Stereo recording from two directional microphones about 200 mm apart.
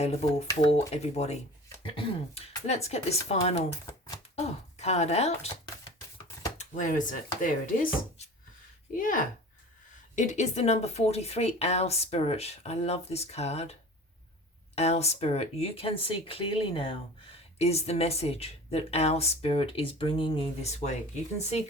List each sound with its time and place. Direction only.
0.0 s speech: 30° left (ahead or behind)
6.6 s speech: 40° left (ahead or behind)
14.8 s speech: 30° left (ahead or behind)